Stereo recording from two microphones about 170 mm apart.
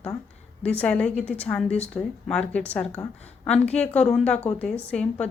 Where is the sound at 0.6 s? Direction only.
10° left (ahead or behind).